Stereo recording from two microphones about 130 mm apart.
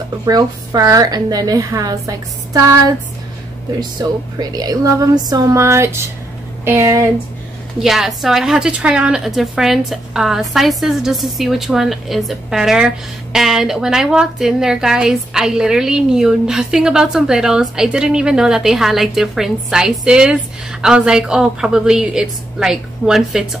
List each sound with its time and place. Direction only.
0.2 s a woman's voice: 25° right (ahead or behind)
4.0 s a woman's voice: 30° right (ahead or behind)
7.8 s a woman's voice: 5° right (ahead or behind)